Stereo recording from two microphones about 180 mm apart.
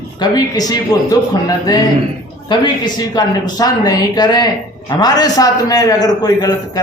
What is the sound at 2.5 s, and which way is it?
A man's voice, 25° left (ahead or behind).